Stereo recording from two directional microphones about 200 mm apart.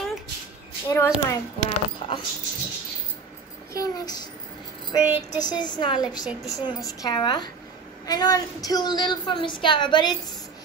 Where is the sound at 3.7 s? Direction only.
20° left (ahead or behind).